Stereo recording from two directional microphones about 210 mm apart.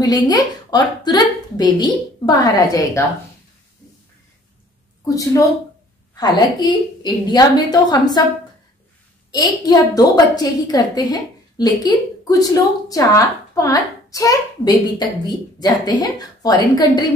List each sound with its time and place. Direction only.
0.3 s a woman's voice: 20° left (ahead or behind)
5.0 s a woman's voice: 15° left (ahead or behind)
9.3 s a woman's voice: 20° left (ahead or behind)